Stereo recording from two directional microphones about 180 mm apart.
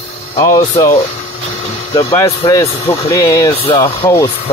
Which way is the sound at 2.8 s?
30° left (ahead or behind).